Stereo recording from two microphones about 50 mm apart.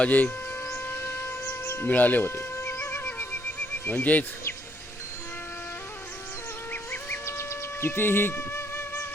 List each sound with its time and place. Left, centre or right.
0.0 s speech: left
0.7 s music: left
1.9 s speech: left
2.2 s music: left
3.8 s speech: left
7.3 s music: left